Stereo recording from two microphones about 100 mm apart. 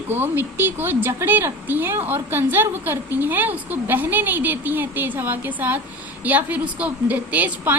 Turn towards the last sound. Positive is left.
turn(degrees=-15)  # may be behind; listen again after turning